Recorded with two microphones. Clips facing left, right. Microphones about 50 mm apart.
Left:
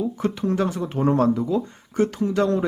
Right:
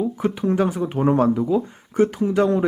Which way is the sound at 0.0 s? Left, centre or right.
Centre.